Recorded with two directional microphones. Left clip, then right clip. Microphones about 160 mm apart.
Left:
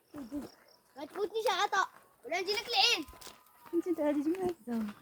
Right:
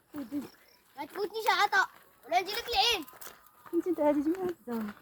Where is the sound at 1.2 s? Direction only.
90° right.